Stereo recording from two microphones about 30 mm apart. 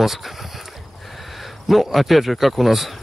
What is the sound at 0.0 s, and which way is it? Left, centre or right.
Speech, centre.